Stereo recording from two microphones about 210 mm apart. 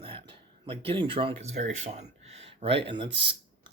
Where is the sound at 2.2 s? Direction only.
30° right (ahead or behind).